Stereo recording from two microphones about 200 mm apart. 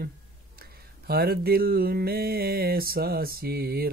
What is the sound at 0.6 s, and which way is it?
Speech, 50° right (ahead or behind).